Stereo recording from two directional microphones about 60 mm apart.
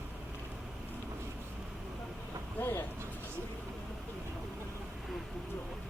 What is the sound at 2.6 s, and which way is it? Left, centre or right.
Vehicle, left.